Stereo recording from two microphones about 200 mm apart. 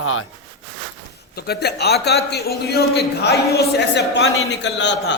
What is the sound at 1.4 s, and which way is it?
A man's voice, 55° left (ahead or behind).